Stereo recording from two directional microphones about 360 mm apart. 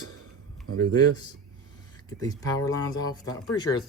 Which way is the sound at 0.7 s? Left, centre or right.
Right.